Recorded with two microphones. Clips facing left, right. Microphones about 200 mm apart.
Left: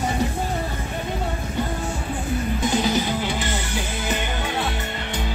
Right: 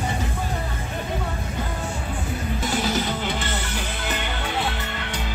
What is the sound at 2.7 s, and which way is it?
Music, 15° left (ahead or behind).